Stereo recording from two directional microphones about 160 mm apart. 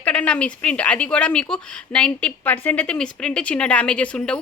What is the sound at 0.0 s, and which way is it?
Speech, 5° left (ahead or behind).